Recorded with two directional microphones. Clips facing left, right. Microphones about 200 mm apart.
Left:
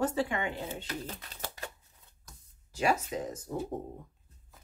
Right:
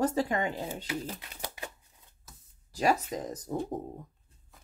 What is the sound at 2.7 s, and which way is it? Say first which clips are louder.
Speech: right 2 dB; 35° right (ahead or behind).